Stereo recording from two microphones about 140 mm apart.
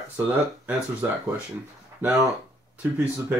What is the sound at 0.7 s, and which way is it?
Speech, 10° right (ahead or behind).